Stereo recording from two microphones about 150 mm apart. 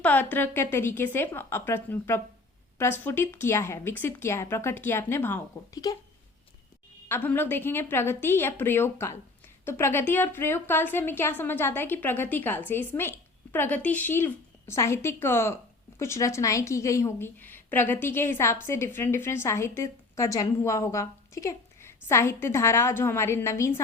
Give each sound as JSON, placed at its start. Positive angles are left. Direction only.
{"t": 0.0, "sound": "a woman's voice", "side_deg": 10}
{"t": 7.1, "sound": "a woman's voice", "side_deg": 15}